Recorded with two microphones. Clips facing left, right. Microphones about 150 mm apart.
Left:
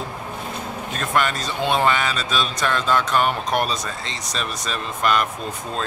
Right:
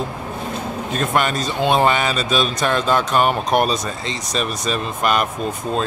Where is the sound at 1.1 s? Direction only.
20° right (ahead or behind).